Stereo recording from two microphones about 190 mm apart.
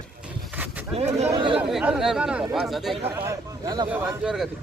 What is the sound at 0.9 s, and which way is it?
Speech, 35° right (ahead or behind).